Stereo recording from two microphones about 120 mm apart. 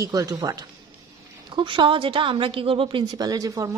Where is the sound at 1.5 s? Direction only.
40° right (ahead or behind).